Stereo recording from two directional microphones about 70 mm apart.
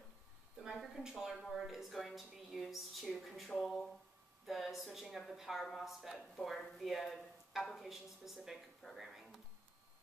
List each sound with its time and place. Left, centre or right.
0.6 s a woman's voice: centre